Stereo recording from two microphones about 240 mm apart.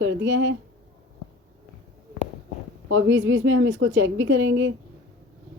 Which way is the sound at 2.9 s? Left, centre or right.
Right.